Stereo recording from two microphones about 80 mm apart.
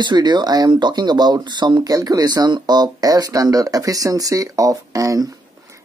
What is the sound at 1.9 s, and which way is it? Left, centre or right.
Speech, right.